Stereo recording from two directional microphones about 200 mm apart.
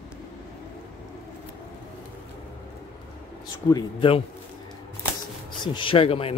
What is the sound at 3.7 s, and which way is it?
Speech, 25° left (ahead or behind).